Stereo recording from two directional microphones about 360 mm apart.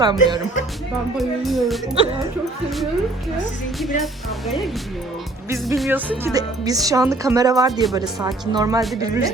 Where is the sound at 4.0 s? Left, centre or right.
Centre.